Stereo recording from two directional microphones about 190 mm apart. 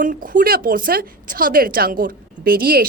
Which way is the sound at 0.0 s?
45° right (ahead or behind).